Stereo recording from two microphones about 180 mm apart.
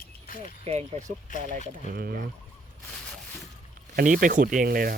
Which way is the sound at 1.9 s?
60° right (ahead or behind).